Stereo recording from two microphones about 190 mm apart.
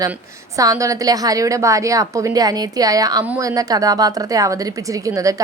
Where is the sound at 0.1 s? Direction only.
15° right (ahead or behind).